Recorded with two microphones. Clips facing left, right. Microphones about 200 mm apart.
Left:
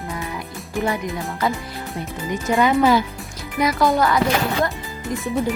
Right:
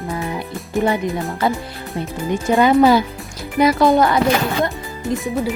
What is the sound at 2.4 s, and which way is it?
Speech, 35° right (ahead or behind).